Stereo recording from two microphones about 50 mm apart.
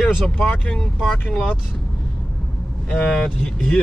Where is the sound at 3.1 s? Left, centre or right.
Centre.